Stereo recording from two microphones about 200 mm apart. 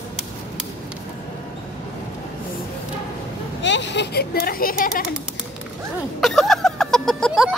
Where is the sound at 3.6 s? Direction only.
65° left (ahead or behind); by 5.1 s 45° left (ahead or behind).